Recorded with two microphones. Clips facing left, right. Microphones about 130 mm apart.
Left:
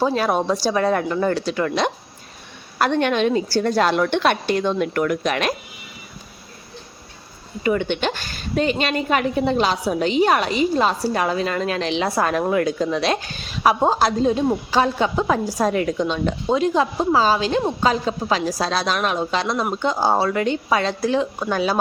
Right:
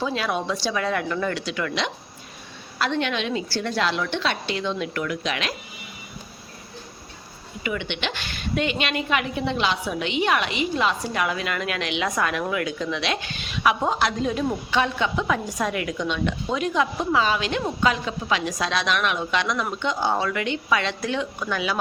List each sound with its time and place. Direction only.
0.0 s a woman's voice: 40° left (ahead or behind)
2.7 s a woman's voice: 50° left (ahead or behind)
7.6 s a woman's voice: 45° left (ahead or behind)